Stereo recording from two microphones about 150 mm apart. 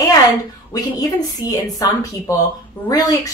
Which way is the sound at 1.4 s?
25° left (ahead or behind).